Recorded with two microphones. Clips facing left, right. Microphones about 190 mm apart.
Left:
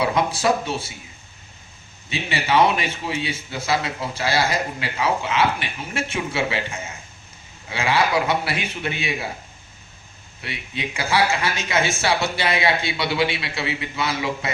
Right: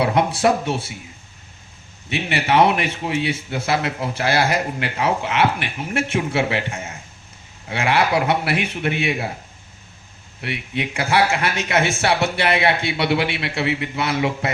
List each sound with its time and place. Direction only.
0.0 s a man's voice: 65° right (ahead or behind)
2.0 s a man's voice: 65° right (ahead or behind)
7.7 s a man's voice: 60° right (ahead or behind)
10.4 s a man's voice: 65° right (ahead or behind)